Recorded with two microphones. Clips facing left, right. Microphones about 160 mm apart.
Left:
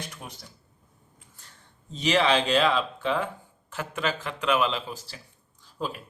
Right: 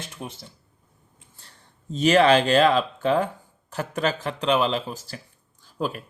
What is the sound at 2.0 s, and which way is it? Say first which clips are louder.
Speech: right 6 dB; 50° right (ahead or behind).